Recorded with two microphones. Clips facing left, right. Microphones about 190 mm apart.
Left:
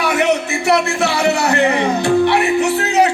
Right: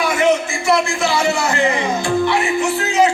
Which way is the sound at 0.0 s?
65° left (ahead or behind).